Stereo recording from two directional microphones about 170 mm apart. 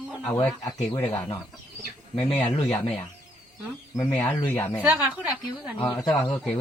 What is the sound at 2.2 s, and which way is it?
Speech, 5° left (ahead or behind).